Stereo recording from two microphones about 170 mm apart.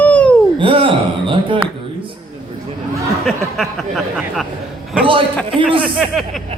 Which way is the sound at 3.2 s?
Centre (ahead or behind).